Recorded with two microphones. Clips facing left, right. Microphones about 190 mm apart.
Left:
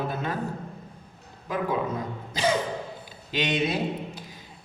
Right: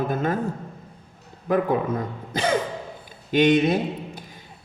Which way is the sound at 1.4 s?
55° right (ahead or behind).